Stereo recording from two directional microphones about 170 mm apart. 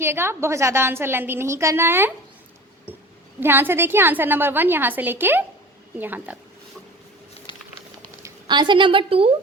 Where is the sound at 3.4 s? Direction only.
10° right (ahead or behind).